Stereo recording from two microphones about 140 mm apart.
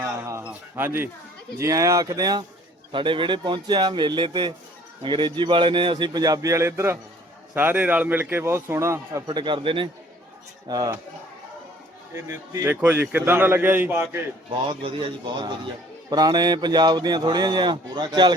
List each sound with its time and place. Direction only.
0.0 s a man's voice: 20° right (ahead or behind)
9.2 s speech: 35° right (ahead or behind)
12.1 s a man's voice: 20° right (ahead or behind)
14.7 s speech: 40° right (ahead or behind)